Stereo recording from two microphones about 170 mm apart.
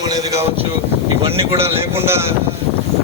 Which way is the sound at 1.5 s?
15° right (ahead or behind).